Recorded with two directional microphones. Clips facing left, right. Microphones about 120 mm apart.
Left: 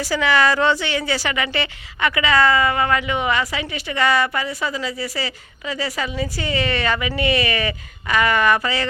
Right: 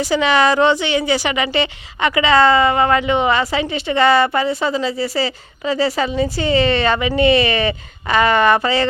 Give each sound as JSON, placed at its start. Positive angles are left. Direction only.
{"t": 0.0, "sound": "a woman's voice", "side_deg": -20}